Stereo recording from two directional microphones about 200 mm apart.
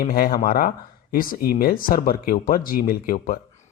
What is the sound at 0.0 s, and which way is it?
Speech, 45° left (ahead or behind).